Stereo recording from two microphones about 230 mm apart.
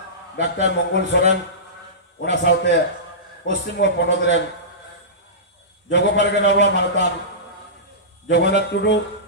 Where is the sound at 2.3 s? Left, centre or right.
Left.